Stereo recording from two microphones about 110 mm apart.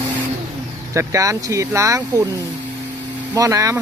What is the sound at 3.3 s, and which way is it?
Speech, 30° right (ahead or behind).